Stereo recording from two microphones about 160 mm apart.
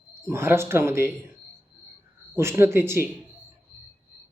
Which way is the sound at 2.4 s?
15° right (ahead or behind).